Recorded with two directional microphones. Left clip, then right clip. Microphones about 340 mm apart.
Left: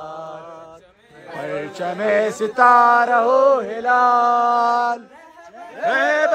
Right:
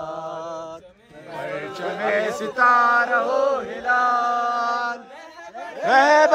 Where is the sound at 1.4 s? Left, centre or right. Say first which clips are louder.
Left 3 dB; centre.